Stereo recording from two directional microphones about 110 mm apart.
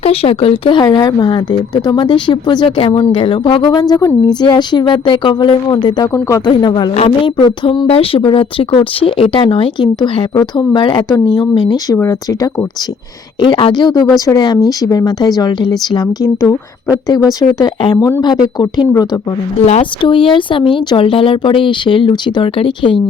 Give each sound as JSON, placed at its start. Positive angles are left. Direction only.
{"t": 0.0, "sound": "speech", "side_deg": 60}
{"t": 0.8, "sound": "speech", "side_deg": 40}
{"t": 6.9, "sound": "a woman's voice", "side_deg": 65}
{"t": 7.3, "sound": "speech", "side_deg": 45}
{"t": 7.9, "sound": "speech", "side_deg": 60}
{"t": 9.8, "sound": "speech", "side_deg": 40}
{"t": 13.4, "sound": "speech", "side_deg": 45}
{"t": 20.0, "sound": "speech", "side_deg": 50}